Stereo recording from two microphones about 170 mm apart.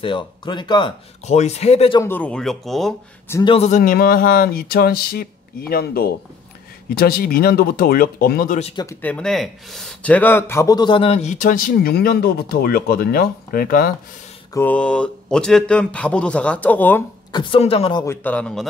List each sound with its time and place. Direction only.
0.0 s speech: 30° left (ahead or behind)
1.2 s speech: 40° left (ahead or behind)
2.0 s speech: 10° left (ahead or behind)
3.4 s speech: 40° left (ahead or behind); by 8.5 s 60° left (ahead or behind)
9.0 s a man's voice: 5° left (ahead or behind); by 13.9 s 60° left (ahead or behind)
14.5 s speech: 10° left (ahead or behind)
17.3 s speech: 30° left (ahead or behind)
18.0 s speech: 10° left (ahead or behind)